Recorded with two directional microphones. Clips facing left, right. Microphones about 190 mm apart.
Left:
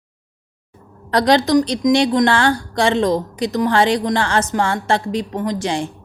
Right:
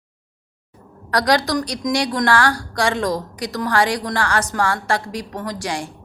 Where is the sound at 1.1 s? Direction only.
25° left (ahead or behind).